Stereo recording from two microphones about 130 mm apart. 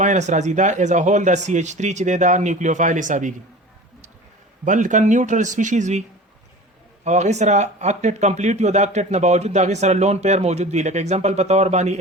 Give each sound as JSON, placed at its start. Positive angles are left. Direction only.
{"t": 0.0, "sound": "speech", "side_deg": -70}
{"t": 4.6, "sound": "speech", "side_deg": -75}
{"t": 7.0, "sound": "speech", "side_deg": -60}